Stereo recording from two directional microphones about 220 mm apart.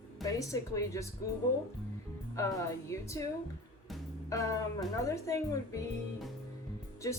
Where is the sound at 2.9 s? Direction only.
15° left (ahead or behind).